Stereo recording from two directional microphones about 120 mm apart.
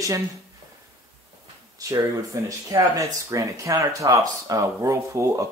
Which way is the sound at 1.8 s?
25° right (ahead or behind).